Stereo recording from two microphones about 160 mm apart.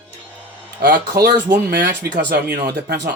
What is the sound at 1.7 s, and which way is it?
Speech, 90° right.